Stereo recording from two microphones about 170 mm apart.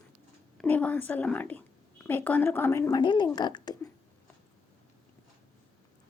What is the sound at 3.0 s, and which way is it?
Speech, 25° left (ahead or behind).